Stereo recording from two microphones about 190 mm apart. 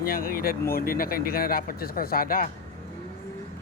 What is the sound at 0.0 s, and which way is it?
Speech, 50° left (ahead or behind).